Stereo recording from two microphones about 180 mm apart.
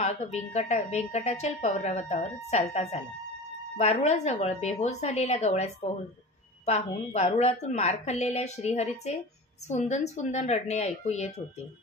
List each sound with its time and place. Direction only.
0.0 s a woman's voice: 40° left (ahead or behind)